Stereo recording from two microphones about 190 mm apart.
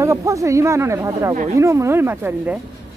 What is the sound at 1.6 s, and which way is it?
Speech, 15° right (ahead or behind).